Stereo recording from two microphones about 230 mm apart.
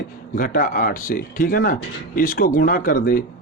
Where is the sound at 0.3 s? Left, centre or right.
Left.